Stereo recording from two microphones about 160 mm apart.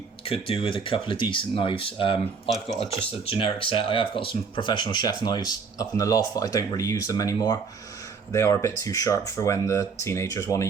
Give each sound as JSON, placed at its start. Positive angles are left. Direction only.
{"t": 0.3, "sound": "speech", "side_deg": 35}